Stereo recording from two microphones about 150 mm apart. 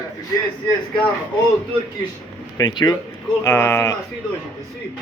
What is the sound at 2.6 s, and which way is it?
Speech, 25° left (ahead or behind).